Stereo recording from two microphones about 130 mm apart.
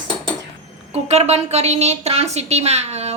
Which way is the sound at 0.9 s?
60° right (ahead or behind).